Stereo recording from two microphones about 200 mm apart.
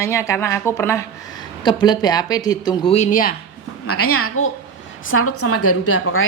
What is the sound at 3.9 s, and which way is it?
A woman's voice, 90° left.